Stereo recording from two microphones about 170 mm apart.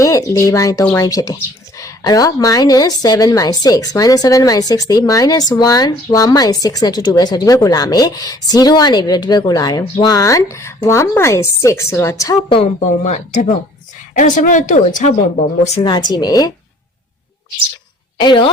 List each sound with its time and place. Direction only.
0.0 s a woman's voice: 20° left (ahead or behind)
13.1 s speech: 45° left (ahead or behind)
15.8 s a woman's voice: 25° left (ahead or behind)
18.2 s a woman's voice: 25° left (ahead or behind)